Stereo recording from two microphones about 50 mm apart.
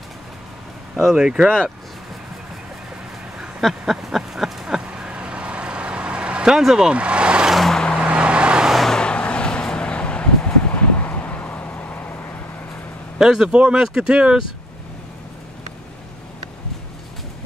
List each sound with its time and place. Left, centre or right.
1.1 s speech: centre
3.6 s a sound: centre
4.9 s vehicle: centre
6.5 s speech: centre
7.0 s vehicle: right
7.7 s vehicle: centre
8.0 s vehicle: right
8.8 s vehicle: centre; by 12.4 s left
13.2 s speech: centre